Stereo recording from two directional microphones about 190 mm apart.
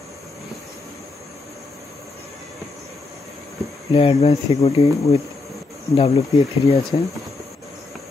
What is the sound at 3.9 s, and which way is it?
Speech, 30° left (ahead or behind).